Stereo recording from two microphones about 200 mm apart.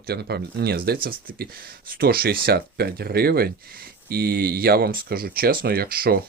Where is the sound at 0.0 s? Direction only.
55° right (ahead or behind).